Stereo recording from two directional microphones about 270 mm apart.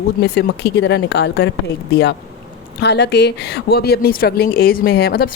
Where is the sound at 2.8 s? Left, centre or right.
Left.